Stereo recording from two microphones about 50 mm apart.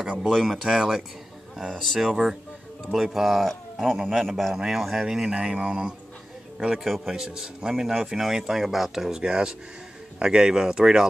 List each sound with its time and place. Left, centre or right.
0.3 s speech: centre
0.7 s speech: centre
4.0 s speech: centre
4.3 s speech: centre
4.6 s speech: centre